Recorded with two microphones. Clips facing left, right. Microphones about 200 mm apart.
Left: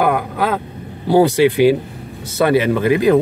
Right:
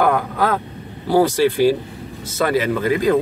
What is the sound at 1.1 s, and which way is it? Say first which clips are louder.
A man's voice: left 3 dB; 20° left (ahead or behind).